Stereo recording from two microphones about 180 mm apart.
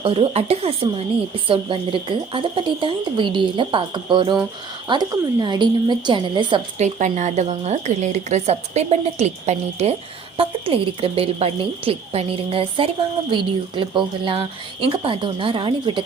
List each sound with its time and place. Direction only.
0.0 s a woman's voice: 30° right (ahead or behind)
6.7 s a woman's voice: 40° right (ahead or behind)